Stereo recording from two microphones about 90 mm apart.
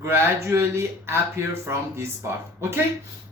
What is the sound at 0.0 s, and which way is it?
Speech, 30° right (ahead or behind).